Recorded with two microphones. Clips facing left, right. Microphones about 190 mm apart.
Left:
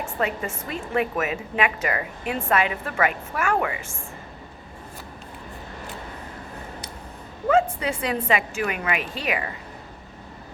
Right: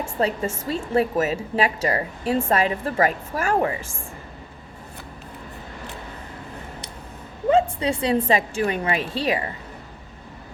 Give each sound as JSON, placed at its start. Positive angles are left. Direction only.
{"t": 0.0, "sound": "a woman's voice", "side_deg": -30}
{"t": 7.4, "sound": "a woman's voice", "side_deg": -25}